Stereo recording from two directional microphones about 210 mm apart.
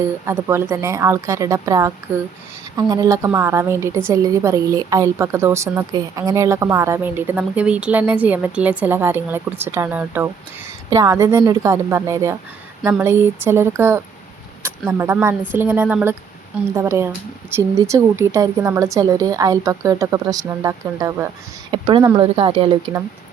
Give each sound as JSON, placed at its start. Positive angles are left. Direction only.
{"t": 0.3, "sound": "a woman's voice", "side_deg": -10}